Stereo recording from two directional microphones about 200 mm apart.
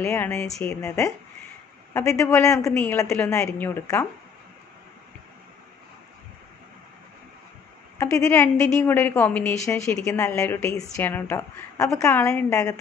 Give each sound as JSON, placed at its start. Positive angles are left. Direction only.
{"t": 0.0, "sound": "a woman's voice", "side_deg": 15}
{"t": 0.8, "sound": "a woman's voice", "side_deg": 15}
{"t": 8.0, "sound": "a woman's voice", "side_deg": 10}